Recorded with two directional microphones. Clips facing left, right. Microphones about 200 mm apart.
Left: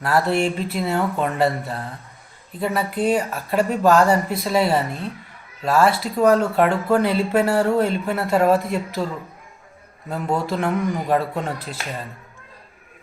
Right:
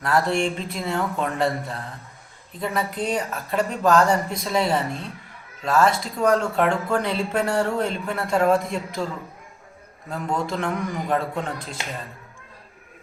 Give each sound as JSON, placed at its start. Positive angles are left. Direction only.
{"t": 0.0, "sound": "speech", "side_deg": 5}
{"t": 10.1, "sound": "speech", "side_deg": 5}